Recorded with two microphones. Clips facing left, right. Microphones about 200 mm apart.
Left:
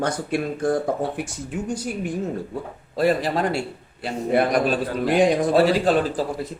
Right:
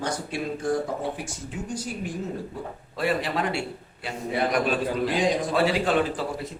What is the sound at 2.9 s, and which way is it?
Speech, 40° left (ahead or behind).